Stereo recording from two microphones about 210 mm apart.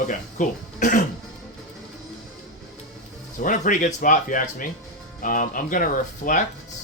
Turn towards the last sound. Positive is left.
turn(degrees=40)  # may be behind; listen again after turning